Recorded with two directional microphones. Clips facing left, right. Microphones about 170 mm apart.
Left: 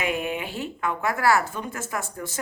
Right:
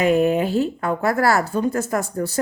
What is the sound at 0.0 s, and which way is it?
Speech, 40° right (ahead or behind).